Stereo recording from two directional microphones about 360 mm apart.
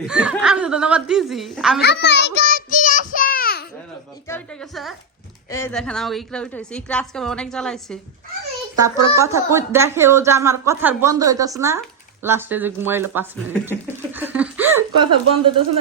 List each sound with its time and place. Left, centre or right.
0.1 s a woman's voice: centre
1.8 s a child's voice: left
2.5 s child singing: left
4.3 s a woman's voice: centre
13.7 s laughter: centre
15.3 s speech: centre